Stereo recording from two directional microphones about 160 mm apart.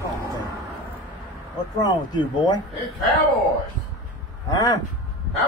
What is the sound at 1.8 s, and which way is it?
Speech, 25° left (ahead or behind).